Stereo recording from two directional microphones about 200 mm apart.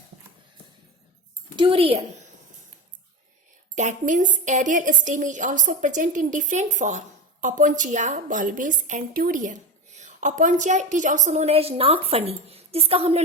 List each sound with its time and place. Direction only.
1.5 s a child's voice: 25° right (ahead or behind)
3.8 s a woman's voice: 40° right (ahead or behind)